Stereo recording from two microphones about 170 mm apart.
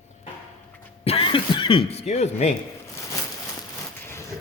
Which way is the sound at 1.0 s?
35° left (ahead or behind).